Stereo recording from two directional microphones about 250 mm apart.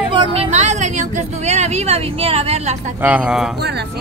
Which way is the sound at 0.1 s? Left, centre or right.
Right.